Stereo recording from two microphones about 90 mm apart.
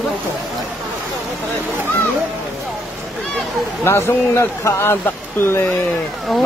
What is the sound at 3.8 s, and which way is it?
Speech, 25° left (ahead or behind).